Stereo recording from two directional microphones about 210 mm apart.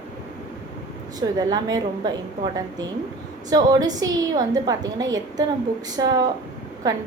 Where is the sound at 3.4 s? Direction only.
20° right (ahead or behind).